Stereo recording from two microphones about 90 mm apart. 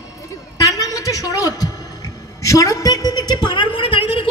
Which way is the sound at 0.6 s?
40° left (ahead or behind).